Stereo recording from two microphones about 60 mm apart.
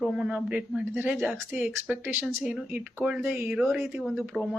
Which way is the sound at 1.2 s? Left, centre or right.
Right.